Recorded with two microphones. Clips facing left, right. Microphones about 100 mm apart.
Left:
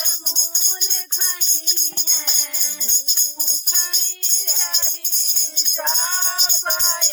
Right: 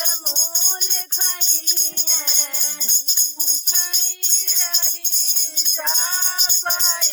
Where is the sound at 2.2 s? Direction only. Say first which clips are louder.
Right 1 dB; 40° right (ahead or behind).